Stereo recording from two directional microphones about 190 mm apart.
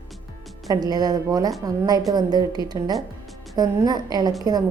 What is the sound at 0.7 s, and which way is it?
A woman's voice, 20° right (ahead or behind).